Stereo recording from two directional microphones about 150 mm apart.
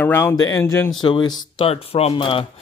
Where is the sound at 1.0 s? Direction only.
30° left (ahead or behind).